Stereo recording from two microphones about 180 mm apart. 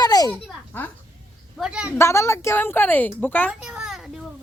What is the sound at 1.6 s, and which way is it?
Speech, 5° right (ahead or behind).